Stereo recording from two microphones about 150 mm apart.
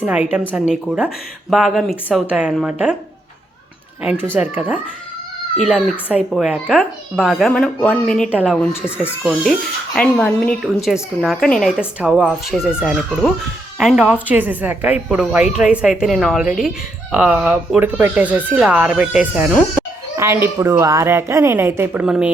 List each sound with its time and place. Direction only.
0.0 s a woman's voice: 10° right (ahead or behind)
4.4 s a woman's voice: 10° right (ahead or behind); by 8.3 s 5° left (ahead or behind)
8.3 s a woman's voice: 10° right (ahead or behind)
11.8 s a woman's voice: 10° right (ahead or behind)